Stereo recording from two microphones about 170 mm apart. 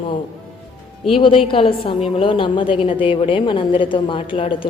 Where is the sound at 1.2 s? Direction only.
30° left (ahead or behind).